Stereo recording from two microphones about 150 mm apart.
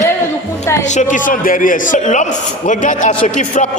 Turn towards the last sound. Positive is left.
turn(degrees=55)  # may be behind; listen again after turning